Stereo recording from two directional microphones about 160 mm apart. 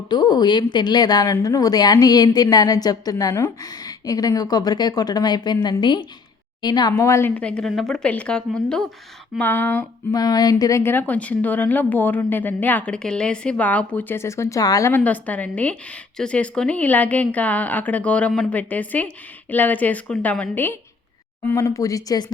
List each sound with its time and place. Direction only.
0.1 s a woman's voice: 25° left (ahead or behind)
10.2 s a woman's voice: 25° left (ahead or behind)
21.5 s a woman's voice: 20° left (ahead or behind)